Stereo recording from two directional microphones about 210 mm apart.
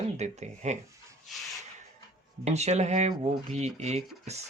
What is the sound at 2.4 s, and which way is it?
Speech, 30° right (ahead or behind).